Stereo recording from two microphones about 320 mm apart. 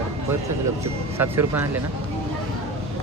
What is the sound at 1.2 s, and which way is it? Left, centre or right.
Speech, centre.